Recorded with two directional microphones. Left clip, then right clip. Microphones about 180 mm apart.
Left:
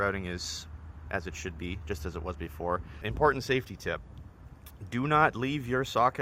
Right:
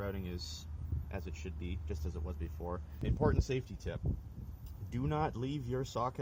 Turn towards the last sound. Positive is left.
turn(degrees=15)  # may be behind; listen again after turning